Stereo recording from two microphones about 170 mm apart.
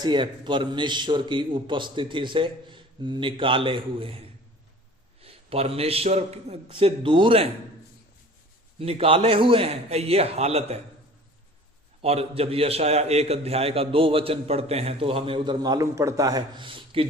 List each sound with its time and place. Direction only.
0.0 s a man's voice: 25° right (ahead or behind)
5.2 s a man's voice: 35° right (ahead or behind)
8.8 s a man's voice: 35° right (ahead or behind)
12.0 s a man's voice: 35° right (ahead or behind)